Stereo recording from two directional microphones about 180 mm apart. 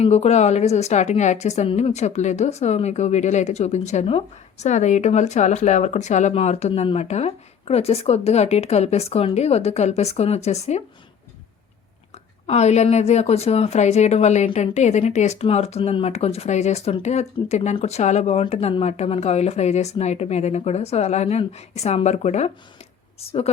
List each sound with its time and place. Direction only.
0.0 s a woman's voice: 35° left (ahead or behind)
12.5 s a woman's voice: 40° left (ahead or behind)